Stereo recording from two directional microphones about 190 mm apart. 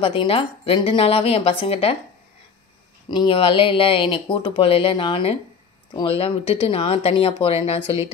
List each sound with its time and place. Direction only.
0.0 s speech: 30° left (ahead or behind)
3.1 s speech: 25° left (ahead or behind)